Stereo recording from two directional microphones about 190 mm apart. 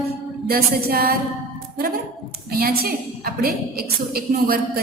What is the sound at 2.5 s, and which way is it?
A woman's voice, 50° right (ahead or behind).